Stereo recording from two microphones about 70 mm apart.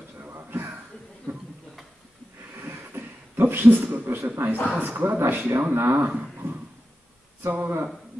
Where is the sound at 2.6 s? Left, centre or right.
Right.